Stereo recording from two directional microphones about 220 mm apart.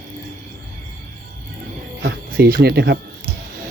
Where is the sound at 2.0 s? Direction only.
45° right (ahead or behind).